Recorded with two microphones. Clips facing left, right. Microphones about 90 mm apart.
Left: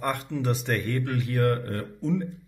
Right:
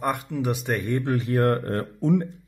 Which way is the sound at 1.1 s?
30° right (ahead or behind).